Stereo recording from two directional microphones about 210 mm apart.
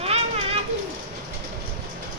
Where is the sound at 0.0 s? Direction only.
30° right (ahead or behind).